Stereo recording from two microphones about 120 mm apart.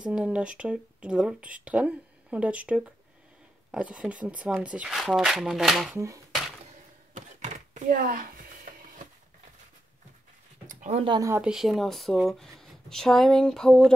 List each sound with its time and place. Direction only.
0.0 s speech: 10° right (ahead or behind)
5.9 s speech: 25° right (ahead or behind)
7.2 s a sound: 90° right
10.7 s a sound: 80° right
11.1 s speech: 30° right (ahead or behind)
11.4 s speech: 5° right (ahead or behind)